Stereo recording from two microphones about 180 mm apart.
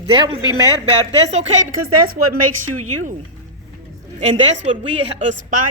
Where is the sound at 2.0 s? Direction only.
55° right (ahead or behind).